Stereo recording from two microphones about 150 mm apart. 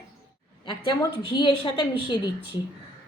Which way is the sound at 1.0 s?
30° left (ahead or behind).